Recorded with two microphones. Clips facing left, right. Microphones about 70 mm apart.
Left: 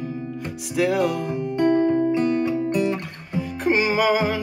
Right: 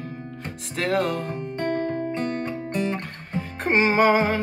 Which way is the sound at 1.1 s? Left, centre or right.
Right.